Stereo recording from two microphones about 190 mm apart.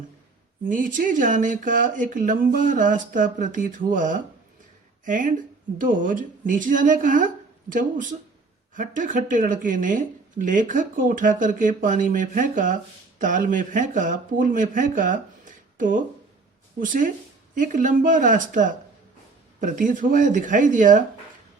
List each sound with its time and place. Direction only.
0.6 s speech: 45° right (ahead or behind)